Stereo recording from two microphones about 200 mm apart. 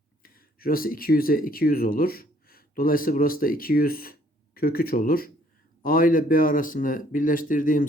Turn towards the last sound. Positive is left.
turn(degrees=40)  # may be behind; listen again after turning